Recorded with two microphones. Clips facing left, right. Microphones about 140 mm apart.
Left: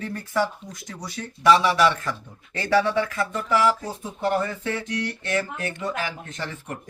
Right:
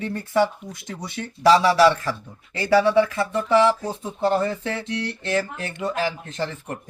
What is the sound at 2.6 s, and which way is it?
Speech, 20° right (ahead or behind).